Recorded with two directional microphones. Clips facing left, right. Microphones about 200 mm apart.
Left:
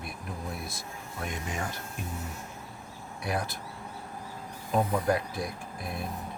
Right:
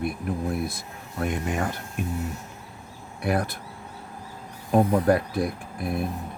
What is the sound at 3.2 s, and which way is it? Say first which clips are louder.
Speech: right 7 dB; 55° right (ahead or behind).